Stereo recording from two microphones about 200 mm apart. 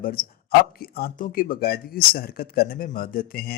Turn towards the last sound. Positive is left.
turn(degrees=50)  # may be behind; listen again after turning